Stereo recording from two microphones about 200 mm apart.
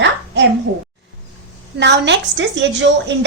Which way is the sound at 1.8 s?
60° right (ahead or behind).